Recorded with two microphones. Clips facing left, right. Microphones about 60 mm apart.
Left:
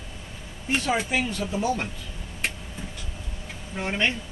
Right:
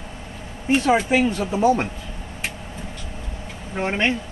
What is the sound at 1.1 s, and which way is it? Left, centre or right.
Speech, right.